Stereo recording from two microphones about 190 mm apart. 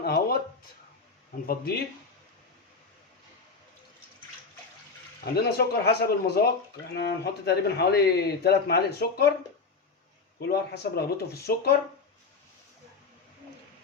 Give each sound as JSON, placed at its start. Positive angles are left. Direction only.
{"t": 0.0, "sound": "a sound", "side_deg": 55}
{"t": 1.5, "sound": "speech", "side_deg": 55}
{"t": 5.2, "sound": "speech", "side_deg": 55}
{"t": 10.5, "sound": "speech", "side_deg": 55}